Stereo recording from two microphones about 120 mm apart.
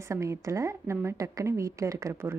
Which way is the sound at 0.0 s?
25° right (ahead or behind).